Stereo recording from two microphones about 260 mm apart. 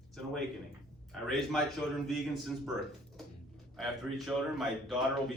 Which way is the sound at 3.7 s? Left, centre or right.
Centre.